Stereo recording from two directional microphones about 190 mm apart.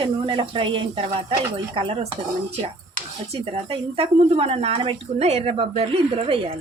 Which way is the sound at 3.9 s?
30° right (ahead or behind).